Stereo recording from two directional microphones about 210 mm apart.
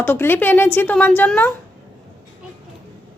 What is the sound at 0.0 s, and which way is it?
A woman's voice, 10° left (ahead or behind).